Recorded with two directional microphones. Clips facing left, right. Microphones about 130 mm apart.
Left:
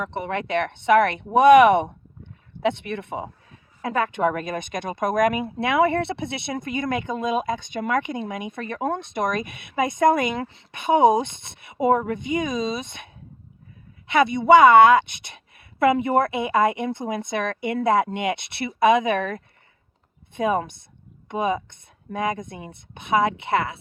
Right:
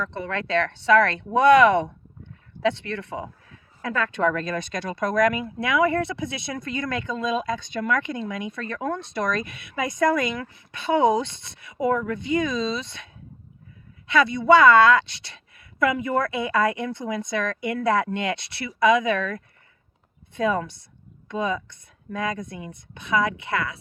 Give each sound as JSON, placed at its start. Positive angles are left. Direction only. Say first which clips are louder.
{"t": 0.0, "sound": "speech", "louder": "left 2 dB", "side_deg": 20}
{"t": 14.1, "sound": "speech", "louder": "left 2 dB", "side_deg": 20}